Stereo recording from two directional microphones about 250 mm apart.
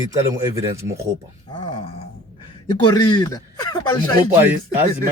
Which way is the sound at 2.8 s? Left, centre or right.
Centre.